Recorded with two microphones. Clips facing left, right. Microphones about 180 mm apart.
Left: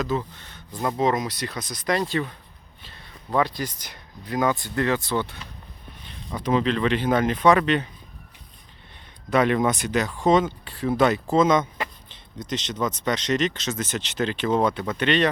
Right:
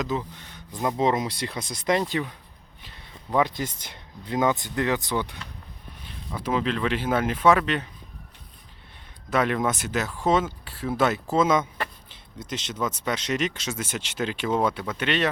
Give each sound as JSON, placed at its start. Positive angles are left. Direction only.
{"t": 0.0, "sound": "speech", "side_deg": -15}
{"t": 3.3, "sound": "speech", "side_deg": -20}
{"t": 9.3, "sound": "speech", "side_deg": 0}